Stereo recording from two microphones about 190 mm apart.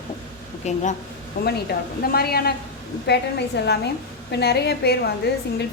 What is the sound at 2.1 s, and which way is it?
A woman's voice, 55° left (ahead or behind).